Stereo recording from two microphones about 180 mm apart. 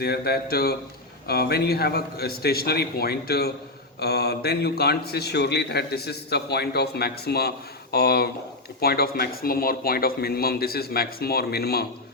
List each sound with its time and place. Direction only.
0.0 s a man's voice: 60° left (ahead or behind)